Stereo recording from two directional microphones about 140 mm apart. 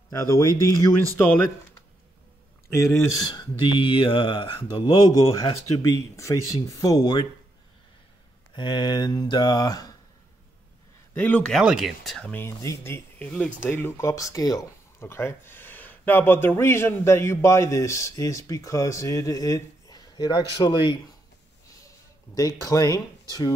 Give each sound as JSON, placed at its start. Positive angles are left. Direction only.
{"t": 0.1, "sound": "speech", "side_deg": 20}
{"t": 2.7, "sound": "speech", "side_deg": 20}
{"t": 8.5, "sound": "speech", "side_deg": 30}
{"t": 11.1, "sound": "speech", "side_deg": 10}
{"t": 21.8, "sound": "speech", "side_deg": 25}